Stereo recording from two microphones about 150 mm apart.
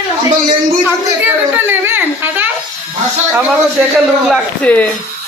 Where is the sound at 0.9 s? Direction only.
15° right (ahead or behind).